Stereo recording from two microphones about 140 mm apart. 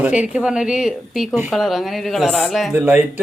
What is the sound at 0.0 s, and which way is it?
A man's voice, 10° right (ahead or behind).